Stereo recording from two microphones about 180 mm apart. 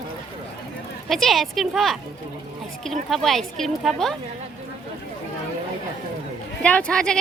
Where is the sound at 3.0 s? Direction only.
Centre (ahead or behind).